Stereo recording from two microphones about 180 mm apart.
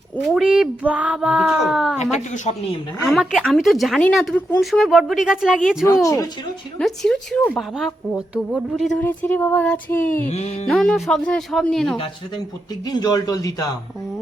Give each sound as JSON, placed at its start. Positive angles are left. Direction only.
{"t": 0.2, "sound": "speech", "side_deg": 0}
{"t": 2.0, "sound": "speech", "side_deg": 40}
{"t": 3.0, "sound": "speech", "side_deg": 0}
{"t": 5.8, "sound": "speech", "side_deg": 20}
{"t": 6.7, "sound": "speech", "side_deg": 0}
{"t": 9.0, "sound": "female singing", "side_deg": 10}
{"t": 10.2, "sound": "speech", "side_deg": 40}
{"t": 10.7, "sound": "speech", "side_deg": 5}
{"t": 12.8, "sound": "speech", "side_deg": 20}